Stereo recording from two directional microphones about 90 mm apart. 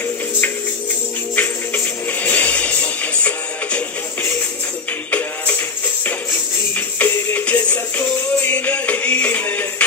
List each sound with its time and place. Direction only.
1.3 s music: 20° left (ahead or behind)
7.0 s music: 20° left (ahead or behind)